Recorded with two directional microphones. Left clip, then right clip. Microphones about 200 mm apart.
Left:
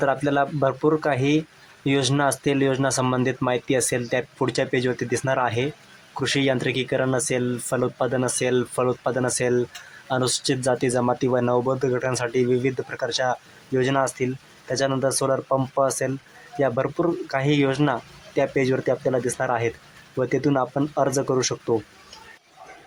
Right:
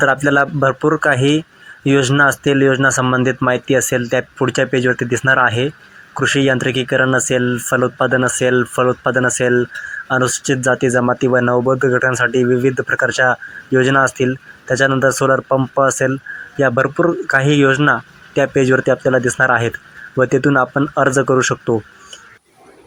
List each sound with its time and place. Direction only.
0.0 s speech: 10° right (ahead or behind)
16.6 s speech: centre (ahead or behind)
16.8 s speech: 15° right (ahead or behind)
21.3 s speech: 15° right (ahead or behind)